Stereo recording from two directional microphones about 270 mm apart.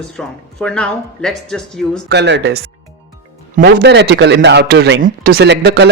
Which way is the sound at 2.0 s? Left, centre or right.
Right.